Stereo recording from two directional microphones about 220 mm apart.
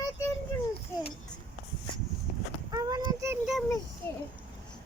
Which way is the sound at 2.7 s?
15° right (ahead or behind).